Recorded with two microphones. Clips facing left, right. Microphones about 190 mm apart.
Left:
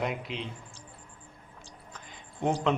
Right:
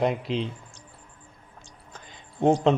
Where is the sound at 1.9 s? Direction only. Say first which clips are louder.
Right 8 dB; 25° right (ahead or behind).